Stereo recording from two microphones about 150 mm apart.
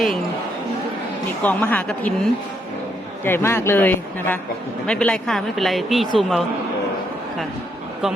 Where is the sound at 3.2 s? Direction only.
15° left (ahead or behind); by 6.5 s centre (ahead or behind).